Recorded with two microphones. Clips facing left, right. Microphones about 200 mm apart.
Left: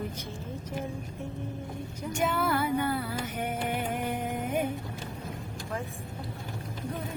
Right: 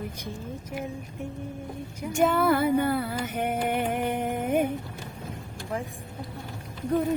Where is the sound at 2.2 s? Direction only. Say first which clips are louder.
Right 6 dB; 55° right (ahead or behind).